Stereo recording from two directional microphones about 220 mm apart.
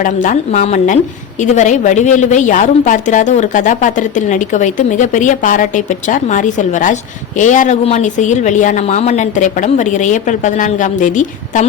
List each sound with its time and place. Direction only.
0.0 s a woman's voice: 35° left (ahead or behind)